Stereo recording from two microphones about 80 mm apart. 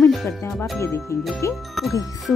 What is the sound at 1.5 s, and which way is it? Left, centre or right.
Speech, centre.